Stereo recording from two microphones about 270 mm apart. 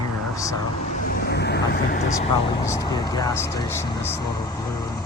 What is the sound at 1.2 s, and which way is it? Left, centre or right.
Speech, left.